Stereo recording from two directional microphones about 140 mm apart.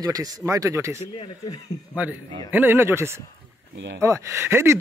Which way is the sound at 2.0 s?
10° right (ahead or behind).